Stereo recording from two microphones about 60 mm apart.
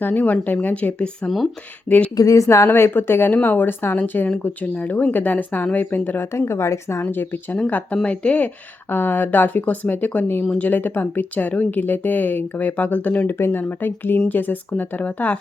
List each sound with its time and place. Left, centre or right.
0.0 s speech: left
2.1 s a woman's voice: left
2.6 s speech: left
3.3 s speech: left
6.3 s speech: left
7.0 s speech: left
8.9 s speech: left